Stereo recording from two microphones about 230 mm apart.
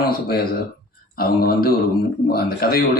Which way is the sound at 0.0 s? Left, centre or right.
Left.